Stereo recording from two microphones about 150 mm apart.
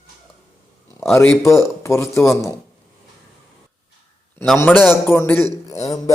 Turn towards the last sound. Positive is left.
turn(degrees=25)  # may be behind; listen again after turning